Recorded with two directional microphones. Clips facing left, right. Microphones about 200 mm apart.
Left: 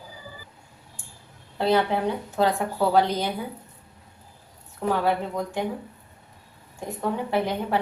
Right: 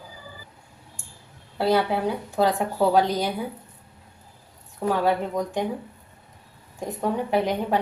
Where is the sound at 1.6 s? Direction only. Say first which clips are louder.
Even; 10° right (ahead or behind).